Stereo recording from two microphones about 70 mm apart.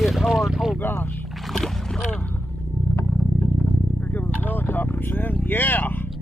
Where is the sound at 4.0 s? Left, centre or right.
Left.